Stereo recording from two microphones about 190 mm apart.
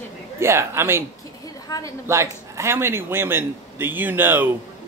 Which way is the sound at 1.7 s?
20° left (ahead or behind).